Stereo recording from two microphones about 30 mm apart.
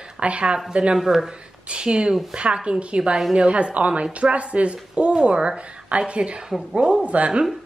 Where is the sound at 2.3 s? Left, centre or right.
Right.